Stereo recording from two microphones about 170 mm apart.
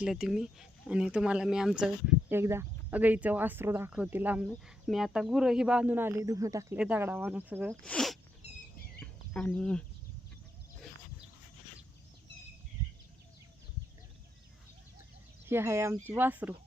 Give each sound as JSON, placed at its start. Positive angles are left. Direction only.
{"t": 0.0, "sound": "speech", "side_deg": -5}
{"t": 6.7, "sound": "speech", "side_deg": -10}
{"t": 7.9, "sound": "speech", "side_deg": 0}
{"t": 8.4, "sound": "a sound", "side_deg": 40}
{"t": 9.0, "sound": "chicken", "side_deg": 5}
{"t": 15.4, "sound": "speech", "side_deg": -15}